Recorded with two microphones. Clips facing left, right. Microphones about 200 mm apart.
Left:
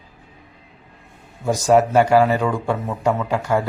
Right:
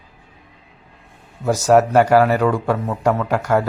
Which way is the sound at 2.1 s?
15° left (ahead or behind).